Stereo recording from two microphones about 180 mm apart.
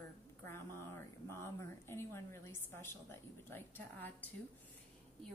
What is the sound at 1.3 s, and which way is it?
A woman's voice, 15° left (ahead or behind).